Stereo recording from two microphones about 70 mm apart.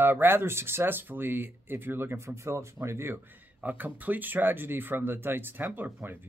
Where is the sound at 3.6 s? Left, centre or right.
Right.